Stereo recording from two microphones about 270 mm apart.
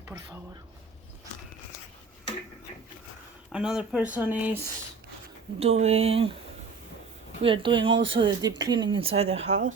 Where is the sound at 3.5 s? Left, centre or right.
Centre.